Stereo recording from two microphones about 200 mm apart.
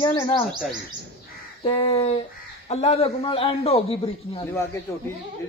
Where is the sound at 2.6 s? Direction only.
30° left (ahead or behind).